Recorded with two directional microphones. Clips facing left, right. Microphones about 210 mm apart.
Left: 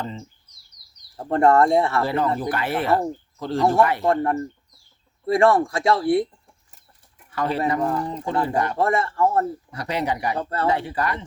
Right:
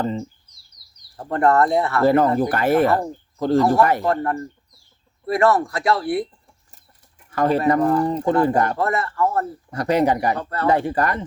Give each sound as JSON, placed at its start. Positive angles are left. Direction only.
{"t": 0.0, "sound": "speech", "side_deg": -45}
{"t": 1.1, "sound": "speech", "side_deg": 25}
{"t": 2.0, "sound": "speech", "side_deg": -45}
{"t": 4.0, "sound": "speech", "side_deg": 25}
{"t": 7.3, "sound": "speech", "side_deg": -45}
{"t": 8.8, "sound": "speech", "side_deg": 25}
{"t": 9.7, "sound": "speech", "side_deg": -45}